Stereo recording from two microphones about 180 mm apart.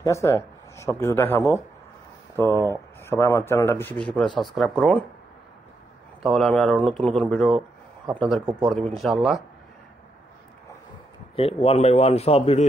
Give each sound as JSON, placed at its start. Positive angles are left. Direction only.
{"t": 0.0, "sound": "speech", "side_deg": 15}
{"t": 2.6, "sound": "speech", "side_deg": 15}
{"t": 6.2, "sound": "speech", "side_deg": 0}
{"t": 11.3, "sound": "a man's voice", "side_deg": 30}